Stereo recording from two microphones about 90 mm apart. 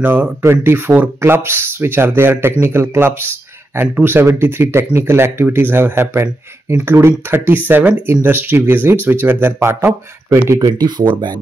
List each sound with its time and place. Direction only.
0.0 s speech: 20° right (ahead or behind)
10.6 s speech: 50° right (ahead or behind)